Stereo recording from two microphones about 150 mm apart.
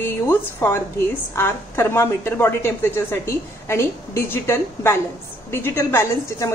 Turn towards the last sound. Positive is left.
turn(degrees=15)  # may be behind; listen again after turning